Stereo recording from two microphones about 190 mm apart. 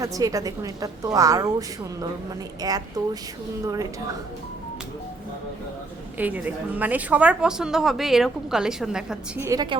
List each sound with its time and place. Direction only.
0.0 s a woman's voice: 20° right (ahead or behind)
6.1 s speech: 10° right (ahead or behind)
9.4 s speech: 20° right (ahead or behind)